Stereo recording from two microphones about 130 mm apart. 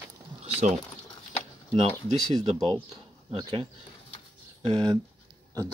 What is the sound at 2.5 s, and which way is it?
Speech, 5° left (ahead or behind).